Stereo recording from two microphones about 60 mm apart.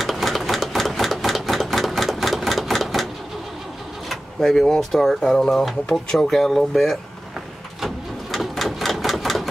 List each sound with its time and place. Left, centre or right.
0.0 s a sound: centre
4.1 s speech: centre
7.8 s typewriter: centre